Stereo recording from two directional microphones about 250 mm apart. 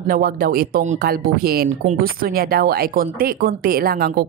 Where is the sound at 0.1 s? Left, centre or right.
Right.